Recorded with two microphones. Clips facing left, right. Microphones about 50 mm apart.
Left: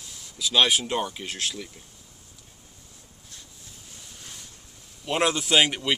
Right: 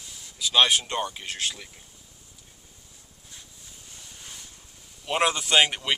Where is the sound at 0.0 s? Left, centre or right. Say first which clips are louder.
Left 1 dB; centre.